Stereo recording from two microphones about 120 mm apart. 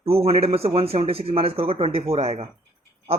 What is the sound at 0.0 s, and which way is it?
A man's voice, 55° right (ahead or behind).